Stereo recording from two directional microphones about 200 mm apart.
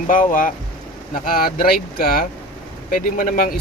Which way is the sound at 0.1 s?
40° left (ahead or behind).